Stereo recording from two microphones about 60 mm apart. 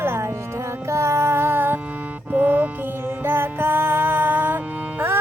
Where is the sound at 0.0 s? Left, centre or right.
Right.